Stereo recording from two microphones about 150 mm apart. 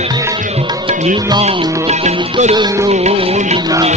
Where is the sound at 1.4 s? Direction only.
45° right (ahead or behind).